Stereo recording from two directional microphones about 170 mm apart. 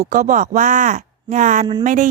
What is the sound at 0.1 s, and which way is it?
A woman's voice, 45° right (ahead or behind).